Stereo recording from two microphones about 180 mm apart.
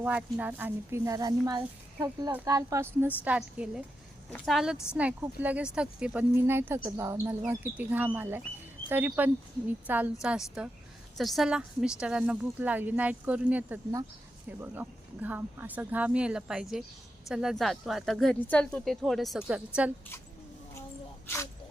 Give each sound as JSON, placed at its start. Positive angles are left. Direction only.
{"t": 0.0, "sound": "speech", "side_deg": -5}
{"t": 3.2, "sound": "speech", "side_deg": -5}